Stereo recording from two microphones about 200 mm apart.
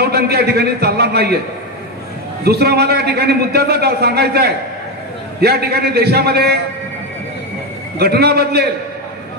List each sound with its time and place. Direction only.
0.0 s a man's voice: 50° right (ahead or behind)
2.4 s a man's voice: 50° right (ahead or behind)
8.0 s a man's voice: 50° right (ahead or behind)